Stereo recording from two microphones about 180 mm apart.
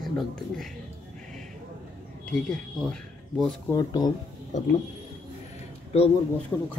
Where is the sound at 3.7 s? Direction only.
20° left (ahead or behind).